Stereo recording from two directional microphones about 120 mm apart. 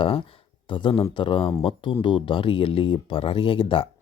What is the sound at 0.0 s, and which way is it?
Speech, 50° left (ahead or behind).